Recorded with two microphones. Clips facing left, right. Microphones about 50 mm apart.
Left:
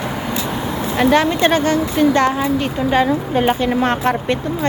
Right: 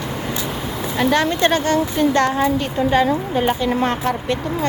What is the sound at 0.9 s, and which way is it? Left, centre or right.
Speech, centre.